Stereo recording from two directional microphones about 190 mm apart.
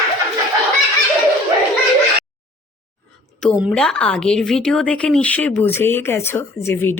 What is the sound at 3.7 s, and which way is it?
Speech, 5° left (ahead or behind).